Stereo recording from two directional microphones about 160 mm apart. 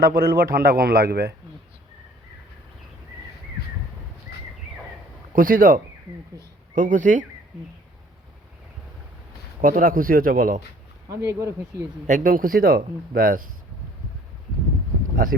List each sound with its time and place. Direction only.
0.0 s a man's voice: 70° right (ahead or behind)
5.3 s speech: 60° right (ahead or behind)
9.6 s speech: 60° right (ahead or behind)
11.3 s speech: 20° right (ahead or behind)
12.0 s speech: 55° right (ahead or behind)
15.1 s speech: 60° right (ahead or behind)